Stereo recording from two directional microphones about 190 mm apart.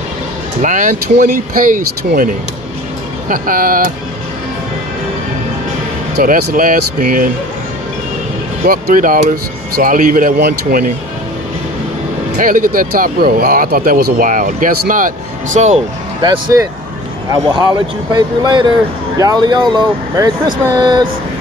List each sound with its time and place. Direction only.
0.6 s speech: 40° right (ahead or behind)
6.1 s speech: 50° right (ahead or behind)
8.6 s speech: 50° right (ahead or behind)
12.4 s speech: 45° right (ahead or behind)
16.2 s speech: 25° right (ahead or behind)
18.1 s speech: 25° right (ahead or behind)